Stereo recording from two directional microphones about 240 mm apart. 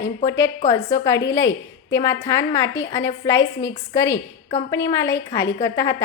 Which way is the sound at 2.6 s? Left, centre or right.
Left.